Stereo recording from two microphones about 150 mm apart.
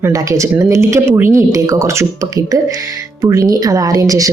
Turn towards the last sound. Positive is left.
turn(degrees=-20)  # may be behind; listen again after turning